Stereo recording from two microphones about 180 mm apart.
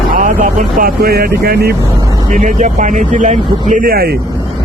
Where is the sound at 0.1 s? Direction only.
45° right (ahead or behind).